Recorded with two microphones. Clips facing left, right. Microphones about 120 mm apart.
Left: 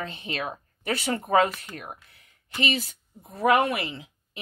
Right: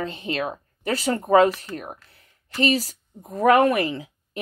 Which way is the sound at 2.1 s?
35° right (ahead or behind).